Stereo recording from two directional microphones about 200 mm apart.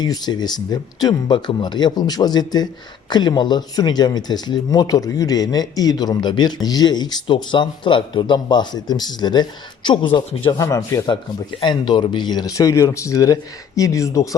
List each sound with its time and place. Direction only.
0.0 s speech: 20° left (ahead or behind)